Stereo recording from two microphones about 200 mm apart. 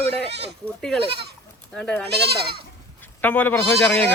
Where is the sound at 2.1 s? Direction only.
55° right (ahead or behind).